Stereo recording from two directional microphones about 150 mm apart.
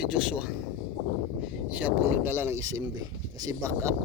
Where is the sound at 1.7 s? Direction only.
10° right (ahead or behind).